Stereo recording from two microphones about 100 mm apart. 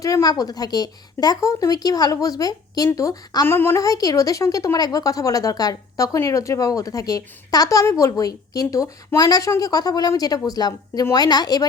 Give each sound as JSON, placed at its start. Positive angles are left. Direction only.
{"t": 0.0, "sound": "speech", "side_deg": 40}
{"t": 3.4, "sound": "a woman's voice", "side_deg": 25}
{"t": 3.8, "sound": "speech", "side_deg": 35}
{"t": 9.1, "sound": "speech", "side_deg": 40}